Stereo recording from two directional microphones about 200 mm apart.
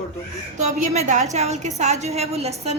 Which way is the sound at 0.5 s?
35° right (ahead or behind).